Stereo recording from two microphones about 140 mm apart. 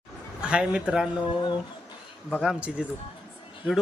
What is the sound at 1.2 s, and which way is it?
Speech, 35° left (ahead or behind).